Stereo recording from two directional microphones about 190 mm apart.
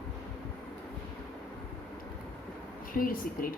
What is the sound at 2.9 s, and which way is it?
Speech, 45° left (ahead or behind).